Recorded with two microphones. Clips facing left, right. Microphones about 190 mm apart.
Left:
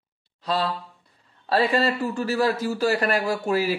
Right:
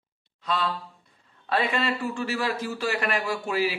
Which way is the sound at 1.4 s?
35° left (ahead or behind).